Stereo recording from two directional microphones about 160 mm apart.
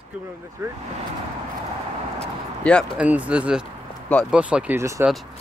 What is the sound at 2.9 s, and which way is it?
Speech, 10° right (ahead or behind).